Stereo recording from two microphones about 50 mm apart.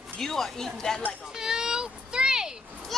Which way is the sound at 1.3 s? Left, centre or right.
Centre.